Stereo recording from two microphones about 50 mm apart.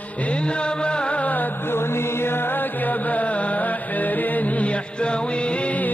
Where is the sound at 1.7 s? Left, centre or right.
Left.